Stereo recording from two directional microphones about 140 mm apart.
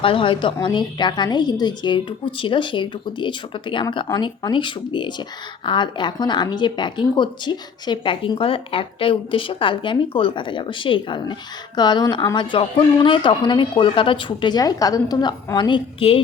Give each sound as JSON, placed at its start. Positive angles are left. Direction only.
{"t": 0.0, "sound": "a woman's voice", "side_deg": 40}